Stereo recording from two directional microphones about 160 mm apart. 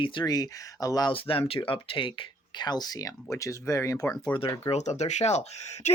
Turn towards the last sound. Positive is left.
turn(degrees=45)  # may be behind; listen again after turning